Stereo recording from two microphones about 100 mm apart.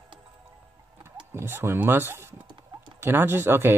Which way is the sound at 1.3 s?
25° right (ahead or behind).